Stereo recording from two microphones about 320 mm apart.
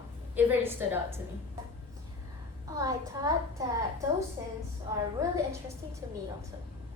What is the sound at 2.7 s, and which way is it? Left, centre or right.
Speech, centre.